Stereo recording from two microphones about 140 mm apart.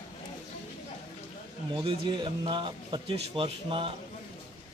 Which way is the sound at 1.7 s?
40° right (ahead or behind).